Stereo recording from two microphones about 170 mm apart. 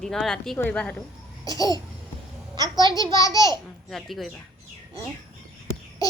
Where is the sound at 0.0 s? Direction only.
Centre (ahead or behind).